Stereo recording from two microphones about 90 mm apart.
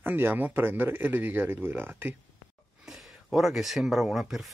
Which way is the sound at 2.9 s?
Centre (ahead or behind).